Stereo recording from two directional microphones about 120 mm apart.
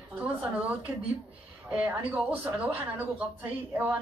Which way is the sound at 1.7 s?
10° right (ahead or behind).